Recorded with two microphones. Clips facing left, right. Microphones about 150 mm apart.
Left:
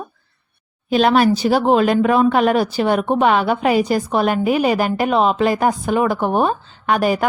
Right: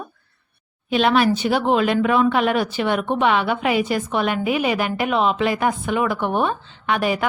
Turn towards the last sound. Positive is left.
turn(degrees=40)  # may be behind; listen again after turning